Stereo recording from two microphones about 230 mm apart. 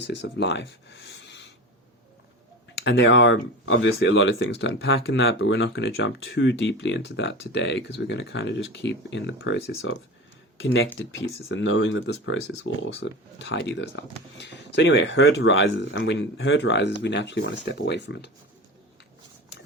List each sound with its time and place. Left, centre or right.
0.1 s speech: left
2.7 s speech: left